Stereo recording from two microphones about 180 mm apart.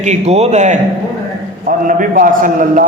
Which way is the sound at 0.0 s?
40° right (ahead or behind).